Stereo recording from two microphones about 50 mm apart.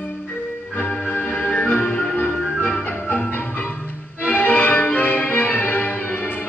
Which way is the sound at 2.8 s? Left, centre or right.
Left.